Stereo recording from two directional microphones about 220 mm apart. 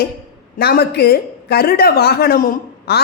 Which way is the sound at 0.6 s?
45° left (ahead or behind).